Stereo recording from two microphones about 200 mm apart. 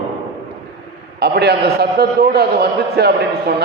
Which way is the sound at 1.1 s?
50° right (ahead or behind).